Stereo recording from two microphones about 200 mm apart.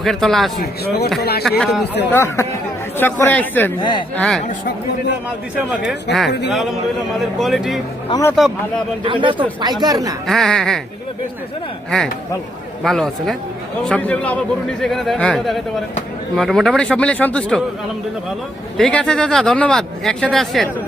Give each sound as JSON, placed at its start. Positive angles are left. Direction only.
{"t": 0.0, "sound": "speech", "side_deg": 0}
{"t": 0.5, "sound": "speech", "side_deg": 50}
{"t": 1.5, "sound": "speech", "side_deg": 0}
{"t": 2.1, "sound": "speech", "side_deg": 15}
{"t": 3.8, "sound": "speech", "side_deg": 20}
{"t": 4.1, "sound": "speech", "side_deg": 5}
{"t": 6.1, "sound": "speech", "side_deg": 60}
{"t": 6.5, "sound": "speech", "side_deg": 0}
{"t": 8.1, "sound": "speech", "side_deg": 15}
{"t": 9.0, "sound": "speech", "side_deg": -25}
{"t": 10.2, "sound": "speech", "side_deg": 0}
{"t": 12.8, "sound": "speech", "side_deg": 0}
{"t": 18.8, "sound": "speech", "side_deg": 5}